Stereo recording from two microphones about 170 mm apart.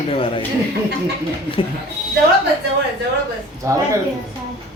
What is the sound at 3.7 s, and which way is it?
Speech, 20° right (ahead or behind).